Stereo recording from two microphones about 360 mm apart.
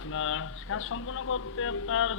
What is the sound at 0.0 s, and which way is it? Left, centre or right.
Speech, left.